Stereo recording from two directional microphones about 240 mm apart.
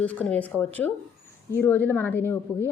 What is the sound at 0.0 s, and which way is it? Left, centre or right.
A woman's voice, centre.